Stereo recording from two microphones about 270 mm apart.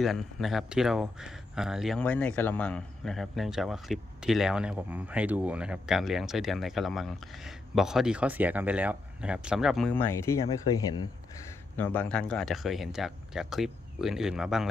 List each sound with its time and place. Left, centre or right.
0.0 s speech: centre